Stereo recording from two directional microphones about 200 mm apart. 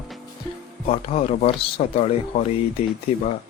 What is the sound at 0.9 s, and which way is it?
Speech, 30° left (ahead or behind).